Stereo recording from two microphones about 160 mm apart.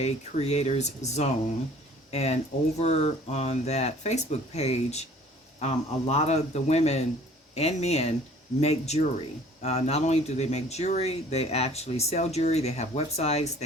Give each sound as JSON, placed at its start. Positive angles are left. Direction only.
{"t": 0.0, "sound": "speech", "side_deg": 45}